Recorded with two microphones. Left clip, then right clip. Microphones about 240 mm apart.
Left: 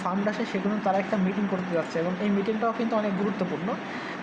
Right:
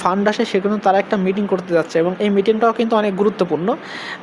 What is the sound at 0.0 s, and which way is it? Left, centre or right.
Speech, right.